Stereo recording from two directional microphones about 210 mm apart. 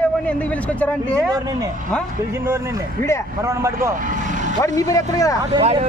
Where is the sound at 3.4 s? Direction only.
15° right (ahead or behind).